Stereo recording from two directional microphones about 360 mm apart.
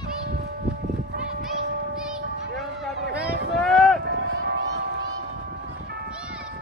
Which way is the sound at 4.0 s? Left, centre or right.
Right.